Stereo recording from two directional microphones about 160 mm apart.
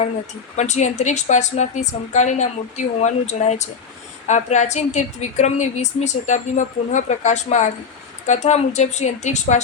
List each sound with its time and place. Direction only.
0.5 s a woman's voice: 45° left (ahead or behind)